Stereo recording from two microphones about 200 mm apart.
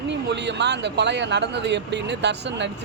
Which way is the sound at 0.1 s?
60° right (ahead or behind).